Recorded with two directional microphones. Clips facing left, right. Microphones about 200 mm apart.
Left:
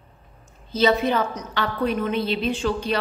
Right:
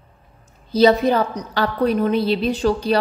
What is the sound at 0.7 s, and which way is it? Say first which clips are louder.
A woman's voice: right 5 dB; 35° right (ahead or behind).